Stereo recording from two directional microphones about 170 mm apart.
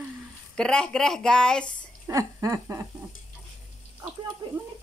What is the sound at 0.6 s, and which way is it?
Speech, 5° left (ahead or behind).